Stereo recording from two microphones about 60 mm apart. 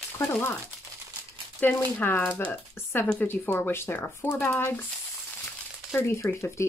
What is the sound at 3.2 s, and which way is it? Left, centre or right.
Speech, left.